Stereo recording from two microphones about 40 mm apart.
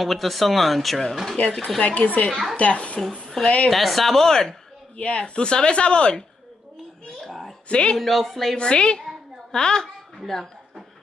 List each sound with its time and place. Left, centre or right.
0.0 s speech: centre
1.4 s a woman's voice: left
3.7 s speech: centre
4.9 s a woman's voice: left
7.2 s a sound: centre
7.7 s a woman's voice: left
8.0 s speech: centre
8.5 s a woman's voice: left; by 10.5 s centre